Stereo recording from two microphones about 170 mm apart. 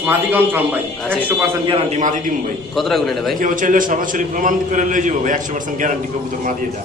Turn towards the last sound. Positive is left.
turn(degrees=-50)  # may be behind; listen again after turning